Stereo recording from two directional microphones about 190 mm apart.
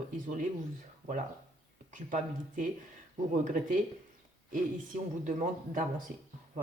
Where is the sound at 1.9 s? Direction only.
45° right (ahead or behind).